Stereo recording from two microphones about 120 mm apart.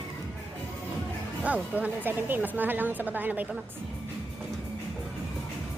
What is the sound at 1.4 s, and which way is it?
A woman's voice, 10° right (ahead or behind).